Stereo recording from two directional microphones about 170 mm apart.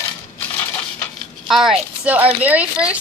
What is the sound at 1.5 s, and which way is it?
Speech, centre (ahead or behind).